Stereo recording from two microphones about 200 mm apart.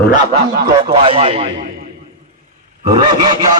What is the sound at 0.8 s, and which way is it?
Speech, 30° right (ahead or behind).